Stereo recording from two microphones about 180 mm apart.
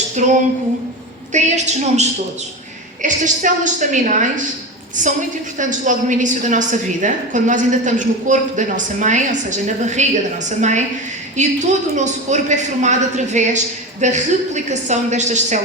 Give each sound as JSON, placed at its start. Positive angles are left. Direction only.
{"t": 0.2, "sound": "a woman's voice", "side_deg": -45}